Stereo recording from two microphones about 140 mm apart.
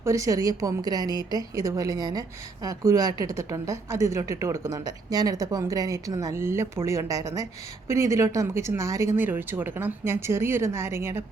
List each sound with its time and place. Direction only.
0.0 s a woman's voice: 20° right (ahead or behind)